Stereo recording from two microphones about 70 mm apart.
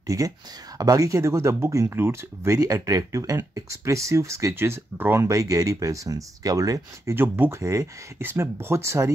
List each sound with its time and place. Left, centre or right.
0.0 s speech: right
1.9 s speech: right
2.5 s speech: right
3.8 s speech: right
5.3 s speech: right
7.2 s speech: right
7.6 s speech: right
8.2 s speech: right